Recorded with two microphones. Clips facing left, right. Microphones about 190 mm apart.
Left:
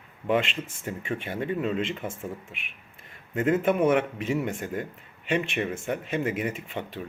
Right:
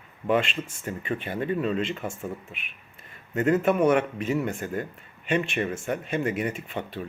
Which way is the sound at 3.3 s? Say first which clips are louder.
Right 1 dB; 5° left (ahead or behind).